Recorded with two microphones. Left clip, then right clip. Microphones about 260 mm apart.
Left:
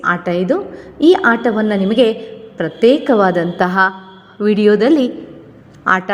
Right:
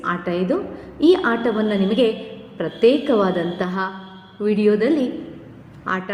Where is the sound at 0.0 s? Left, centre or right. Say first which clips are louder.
Left 7 dB; left.